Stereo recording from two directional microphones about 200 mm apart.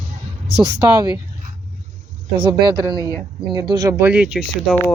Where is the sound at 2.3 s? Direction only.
25° right (ahead or behind); by 4.7 s 5° right (ahead or behind).